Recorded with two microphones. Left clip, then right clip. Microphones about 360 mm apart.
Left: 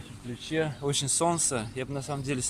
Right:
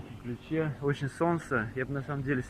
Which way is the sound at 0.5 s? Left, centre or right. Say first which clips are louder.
Left 3 dB; centre.